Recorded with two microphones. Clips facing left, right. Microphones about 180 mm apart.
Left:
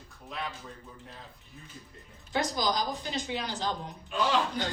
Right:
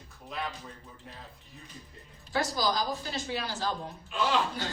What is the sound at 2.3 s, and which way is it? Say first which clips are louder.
A woman's voice: even; 20° left (ahead or behind).